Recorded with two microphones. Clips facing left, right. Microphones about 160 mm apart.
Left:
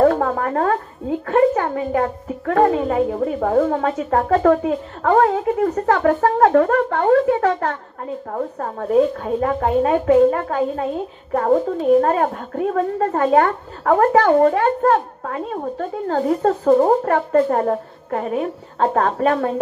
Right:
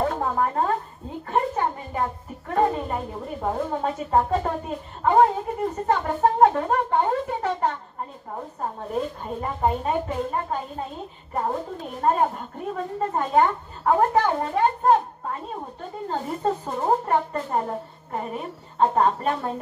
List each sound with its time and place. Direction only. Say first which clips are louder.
0.0 s a woman's voice: left 8 dB; 80° left
12.0 s speech: left 4 dB; 80° left